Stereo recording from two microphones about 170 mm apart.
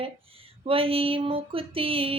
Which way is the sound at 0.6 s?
35° right (ahead or behind).